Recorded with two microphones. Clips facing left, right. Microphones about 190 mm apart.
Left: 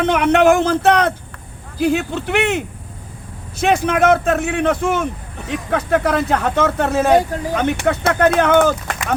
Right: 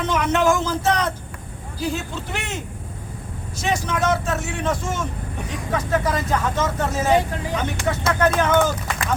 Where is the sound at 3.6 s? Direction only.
55° left (ahead or behind).